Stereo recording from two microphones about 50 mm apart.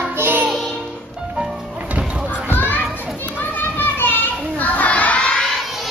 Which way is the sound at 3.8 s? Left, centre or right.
Left.